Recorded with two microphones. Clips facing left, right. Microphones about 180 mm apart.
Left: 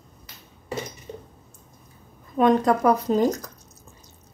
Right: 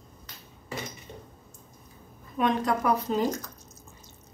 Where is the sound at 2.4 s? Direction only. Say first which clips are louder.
Left 7 dB; 40° left (ahead or behind).